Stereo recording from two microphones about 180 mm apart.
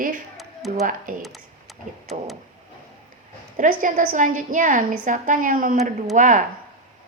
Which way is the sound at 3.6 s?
45° right (ahead or behind).